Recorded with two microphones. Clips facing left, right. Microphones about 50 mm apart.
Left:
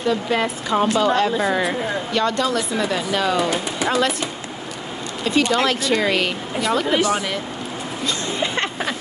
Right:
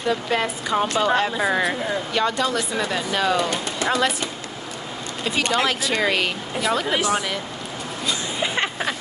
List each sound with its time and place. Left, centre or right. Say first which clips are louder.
0.1 s speech: even; centre
1.0 s speech: left 2 dB; right
1.3 s speech: left 1 dB; centre
8.1 s a sound: left 1 dB; centre